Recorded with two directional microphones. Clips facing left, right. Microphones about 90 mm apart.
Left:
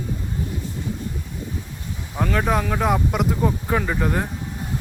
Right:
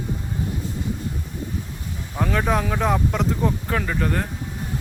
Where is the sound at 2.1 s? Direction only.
Centre (ahead or behind).